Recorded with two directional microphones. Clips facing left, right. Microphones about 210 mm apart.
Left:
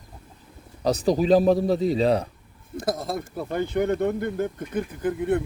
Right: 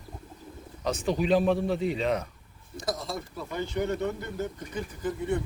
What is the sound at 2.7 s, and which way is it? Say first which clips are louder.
Speech: left 6 dB; 55° left (ahead or behind).